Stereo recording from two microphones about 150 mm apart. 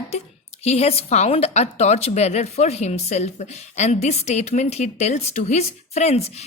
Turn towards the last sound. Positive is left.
turn(degrees=45)  # may be behind; listen again after turning